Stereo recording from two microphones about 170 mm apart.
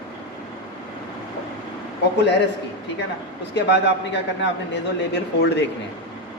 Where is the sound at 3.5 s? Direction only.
85° left.